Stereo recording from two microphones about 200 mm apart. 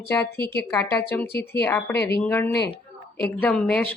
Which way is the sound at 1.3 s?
50° left (ahead or behind).